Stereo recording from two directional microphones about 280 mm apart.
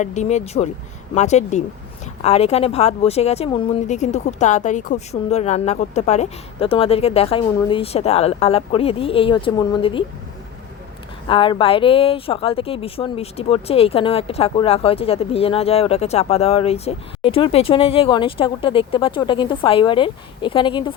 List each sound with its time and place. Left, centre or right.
0.0 s speech: left
11.3 s speech: centre